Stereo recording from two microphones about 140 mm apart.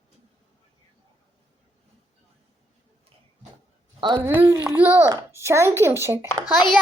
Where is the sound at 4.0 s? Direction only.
35° right (ahead or behind).